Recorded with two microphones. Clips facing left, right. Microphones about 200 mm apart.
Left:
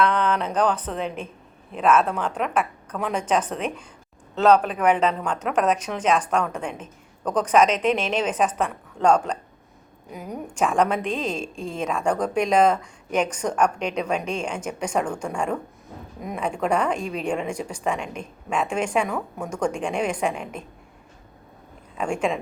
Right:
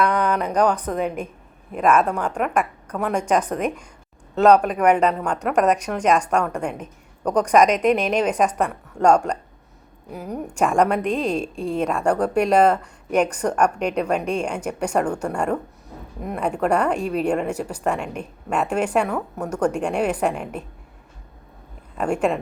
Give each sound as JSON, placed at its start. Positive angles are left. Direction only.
{"t": 0.0, "sound": "a woman's voice", "side_deg": -10}
{"t": 11.0, "sound": "a woman's voice", "side_deg": -35}
{"t": 11.9, "sound": "a woman's voice", "side_deg": -10}
{"t": 16.2, "sound": "a woman's voice", "side_deg": -5}
{"t": 21.9, "sound": "a woman's voice", "side_deg": -5}